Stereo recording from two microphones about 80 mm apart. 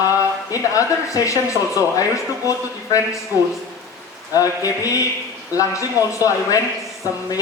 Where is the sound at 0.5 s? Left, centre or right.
Left.